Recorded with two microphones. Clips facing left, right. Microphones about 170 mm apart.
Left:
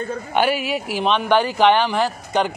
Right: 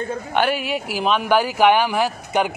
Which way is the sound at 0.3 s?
5° left (ahead or behind).